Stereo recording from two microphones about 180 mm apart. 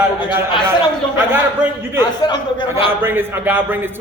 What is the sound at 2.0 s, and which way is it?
Speech, 25° left (ahead or behind).